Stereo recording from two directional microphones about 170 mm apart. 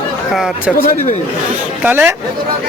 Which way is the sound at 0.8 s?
55° left (ahead or behind).